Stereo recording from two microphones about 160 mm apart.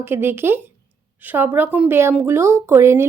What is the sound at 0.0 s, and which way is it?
Speech, 15° right (ahead or behind).